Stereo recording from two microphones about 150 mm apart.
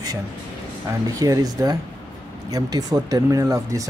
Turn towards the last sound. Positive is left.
turn(degrees=-20)  # may be behind; listen again after turning